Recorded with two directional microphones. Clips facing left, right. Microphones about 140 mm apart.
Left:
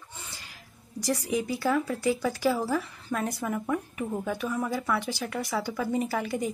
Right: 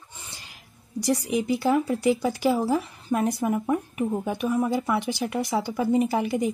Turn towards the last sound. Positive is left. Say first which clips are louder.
# right 5 dB
turn(degrees=-20)  # may be behind; listen again after turning